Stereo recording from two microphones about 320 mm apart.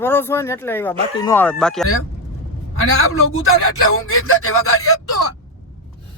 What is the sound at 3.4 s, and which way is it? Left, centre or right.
Speech, left.